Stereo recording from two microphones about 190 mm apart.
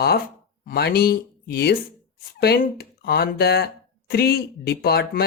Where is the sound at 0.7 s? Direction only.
55° left (ahead or behind).